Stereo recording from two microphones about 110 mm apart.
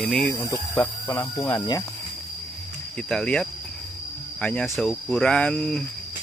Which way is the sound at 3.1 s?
5° left (ahead or behind).